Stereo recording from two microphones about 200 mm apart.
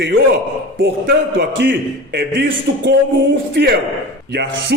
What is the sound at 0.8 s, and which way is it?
A man's voice, 50° right (ahead or behind).